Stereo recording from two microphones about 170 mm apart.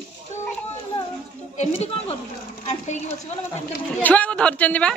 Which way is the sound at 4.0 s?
10° left (ahead or behind).